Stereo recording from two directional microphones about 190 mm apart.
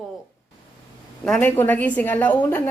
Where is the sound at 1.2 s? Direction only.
5° left (ahead or behind).